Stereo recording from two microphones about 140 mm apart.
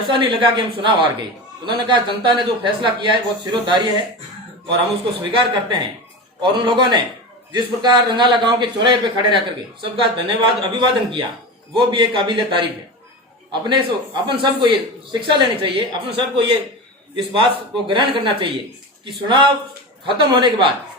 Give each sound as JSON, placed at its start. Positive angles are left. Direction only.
{"t": 0.1, "sound": "speech", "side_deg": -35}
{"t": 5.2, "sound": "speech", "side_deg": -35}